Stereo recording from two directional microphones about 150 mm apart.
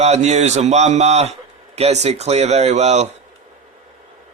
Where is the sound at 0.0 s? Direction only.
45° right (ahead or behind).